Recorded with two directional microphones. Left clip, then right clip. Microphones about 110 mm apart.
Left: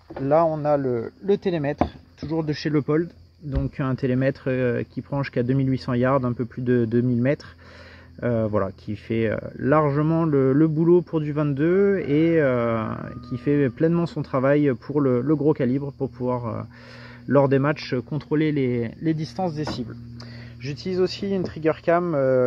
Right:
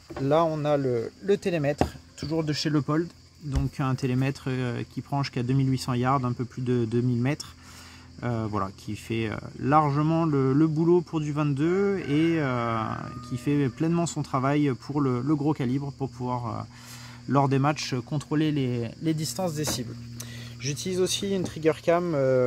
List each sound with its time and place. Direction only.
0.3 s speech: 35° right (ahead or behind); by 10.0 s 10° right (ahead or behind)
10.0 s speech: 20° right (ahead or behind)
10.3 s speech: 10° right (ahead or behind)
21.6 s speech: 25° right (ahead or behind)